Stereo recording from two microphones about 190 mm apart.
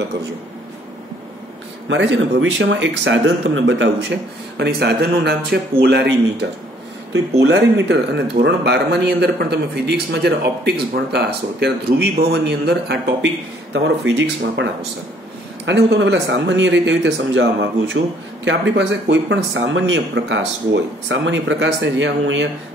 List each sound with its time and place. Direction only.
1.9 s speech: 80° right; by 13.3 s 60° right (ahead or behind)
13.7 s speech: 70° right (ahead or behind)